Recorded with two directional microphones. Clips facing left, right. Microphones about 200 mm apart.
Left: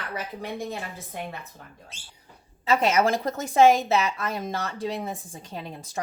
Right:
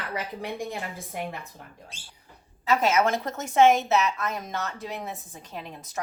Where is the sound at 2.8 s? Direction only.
30° left (ahead or behind).